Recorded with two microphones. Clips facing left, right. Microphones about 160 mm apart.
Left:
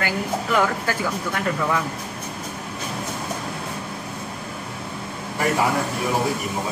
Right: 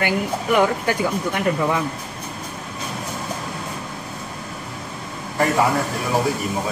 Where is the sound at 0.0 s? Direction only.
20° right (ahead or behind).